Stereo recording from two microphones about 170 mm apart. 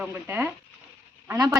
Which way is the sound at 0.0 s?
10° right (ahead or behind).